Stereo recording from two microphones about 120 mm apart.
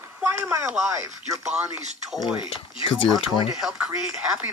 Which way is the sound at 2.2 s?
45° left (ahead or behind).